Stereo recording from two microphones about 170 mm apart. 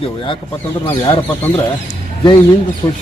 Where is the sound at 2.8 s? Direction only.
20° left (ahead or behind).